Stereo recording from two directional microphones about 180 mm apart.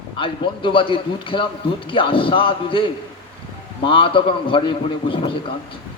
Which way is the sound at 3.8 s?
30° left (ahead or behind).